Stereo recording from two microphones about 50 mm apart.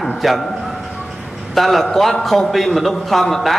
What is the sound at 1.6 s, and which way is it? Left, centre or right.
A man's voice, centre.